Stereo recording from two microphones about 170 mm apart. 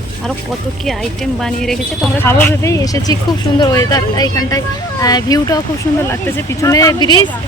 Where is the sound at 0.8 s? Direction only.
Centre (ahead or behind).